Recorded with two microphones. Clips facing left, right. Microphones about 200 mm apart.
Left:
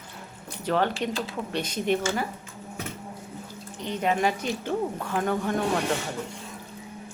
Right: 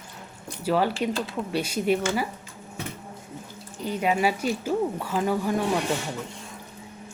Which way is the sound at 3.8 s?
10° right (ahead or behind).